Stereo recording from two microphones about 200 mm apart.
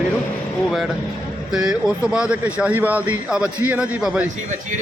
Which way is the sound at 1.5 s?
5° right (ahead or behind).